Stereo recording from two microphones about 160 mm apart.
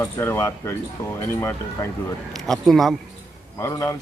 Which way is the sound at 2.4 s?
Centre (ahead or behind).